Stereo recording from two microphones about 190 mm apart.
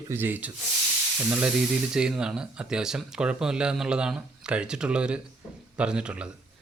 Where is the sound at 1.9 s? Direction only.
5° right (ahead or behind).